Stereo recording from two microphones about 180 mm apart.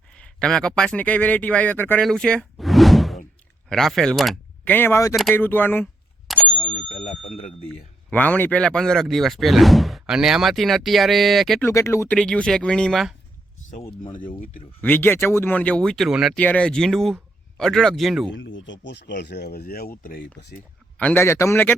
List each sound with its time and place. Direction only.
0.1 s speech: 5° left (ahead or behind)
4.7 s speech: 10° left (ahead or behind)
6.2 s bicycle bell: centre (ahead or behind)
6.9 s bicycle bell: 35° left (ahead or behind)
8.1 s speech: 10° left (ahead or behind)
11.6 s speech: 15° left (ahead or behind)
14.8 s speech: 10° left (ahead or behind)
18.3 s speech: 90° left; by 20.6 s 55° left (ahead or behind)
21.0 s speech: 10° left (ahead or behind)